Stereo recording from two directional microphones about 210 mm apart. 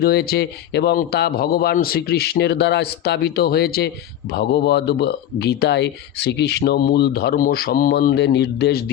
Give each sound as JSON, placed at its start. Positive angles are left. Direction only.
{"t": 0.0, "sound": "a man's voice", "side_deg": 45}